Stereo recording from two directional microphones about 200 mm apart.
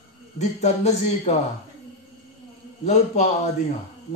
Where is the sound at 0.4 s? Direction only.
35° left (ahead or behind).